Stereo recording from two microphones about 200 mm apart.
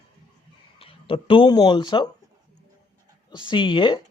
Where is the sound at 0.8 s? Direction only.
30° left (ahead or behind).